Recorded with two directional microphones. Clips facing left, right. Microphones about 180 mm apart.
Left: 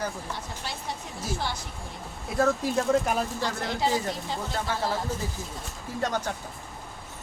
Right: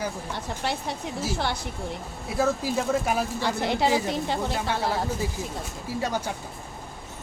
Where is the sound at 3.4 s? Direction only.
70° right (ahead or behind).